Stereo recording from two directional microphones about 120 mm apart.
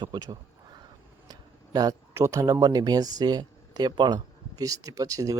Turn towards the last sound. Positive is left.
turn(degrees=-30)  # may be behind; listen again after turning